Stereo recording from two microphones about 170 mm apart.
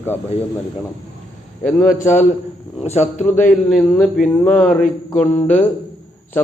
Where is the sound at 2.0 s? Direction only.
45° left (ahead or behind).